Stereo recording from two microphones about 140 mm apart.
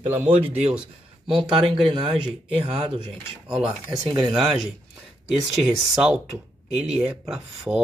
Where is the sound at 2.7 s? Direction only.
45° right (ahead or behind).